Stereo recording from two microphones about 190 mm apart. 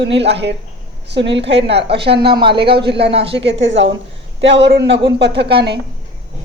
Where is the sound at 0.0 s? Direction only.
65° right (ahead or behind).